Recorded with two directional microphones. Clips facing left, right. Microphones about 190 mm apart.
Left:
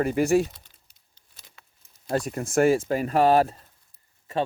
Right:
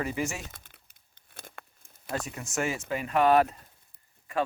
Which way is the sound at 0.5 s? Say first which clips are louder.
Right 2 dB; 55° right (ahead or behind).